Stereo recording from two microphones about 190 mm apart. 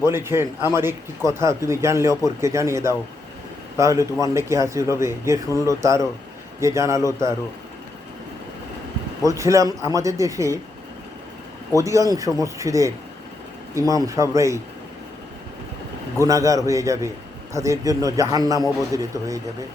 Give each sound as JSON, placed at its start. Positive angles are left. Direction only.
{"t": 0.0, "sound": "speech", "side_deg": -15}
{"t": 9.2, "sound": "speech", "side_deg": -15}
{"t": 11.8, "sound": "speech", "side_deg": -15}
{"t": 16.2, "sound": "speech", "side_deg": -15}